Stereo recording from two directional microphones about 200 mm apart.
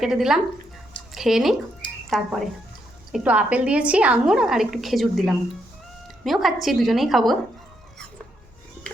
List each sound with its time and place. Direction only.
0.0 s a woman's voice: centre (ahead or behind)